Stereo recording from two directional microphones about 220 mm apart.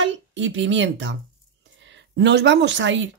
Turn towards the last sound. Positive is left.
turn(degrees=-55)  # may be behind; listen again after turning